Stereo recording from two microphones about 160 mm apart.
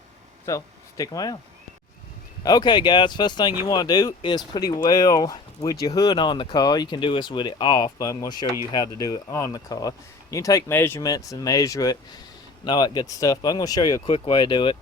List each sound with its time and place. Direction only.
0.4 s speech: 20° left (ahead or behind)
2.4 s speech: 25° left (ahead or behind)